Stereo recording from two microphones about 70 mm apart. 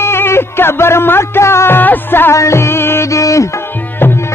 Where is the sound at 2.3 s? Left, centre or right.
Left.